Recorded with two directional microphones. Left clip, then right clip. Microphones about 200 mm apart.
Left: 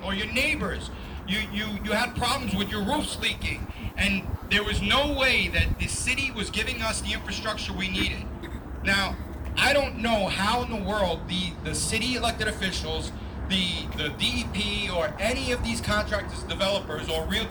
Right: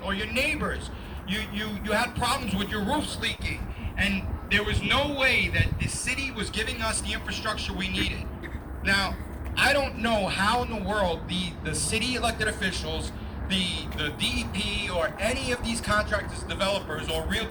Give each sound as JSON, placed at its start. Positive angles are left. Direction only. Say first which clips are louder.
{"t": 0.0, "sound": "speech", "louder": "left 1 dB", "side_deg": 10}
{"t": 3.9, "sound": "a man's voice", "louder": "left 1 dB", "side_deg": 55}
{"t": 6.3, "sound": "speech", "louder": "left 1 dB", "side_deg": 25}